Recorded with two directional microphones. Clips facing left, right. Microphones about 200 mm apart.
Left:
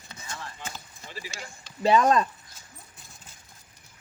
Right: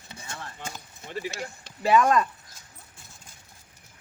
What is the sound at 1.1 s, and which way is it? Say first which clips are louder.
Speech: right 8 dB; 55° right (ahead or behind).